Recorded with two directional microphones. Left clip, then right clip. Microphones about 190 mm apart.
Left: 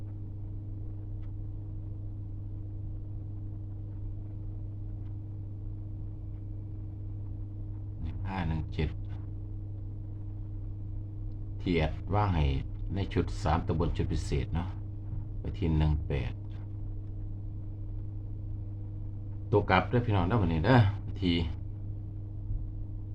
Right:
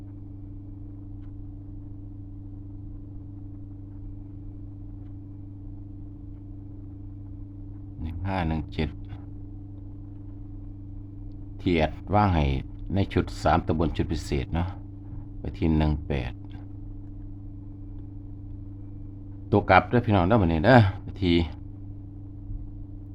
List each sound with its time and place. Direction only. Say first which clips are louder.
8.0 s a sound: right 8 dB; 55° right (ahead or behind)
11.6 s speech: right 6 dB; 55° right (ahead or behind)
19.5 s speech: right 7 dB; 55° right (ahead or behind)